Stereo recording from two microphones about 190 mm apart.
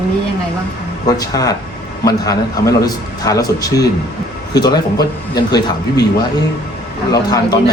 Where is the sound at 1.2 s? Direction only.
20° left (ahead or behind).